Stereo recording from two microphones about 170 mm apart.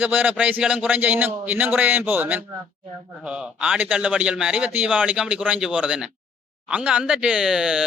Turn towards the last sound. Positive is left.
turn(degrees=-5)  # may be behind; listen again after turning